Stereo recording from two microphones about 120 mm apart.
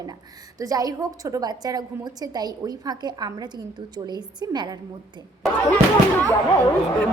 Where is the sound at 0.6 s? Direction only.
30° right (ahead or behind).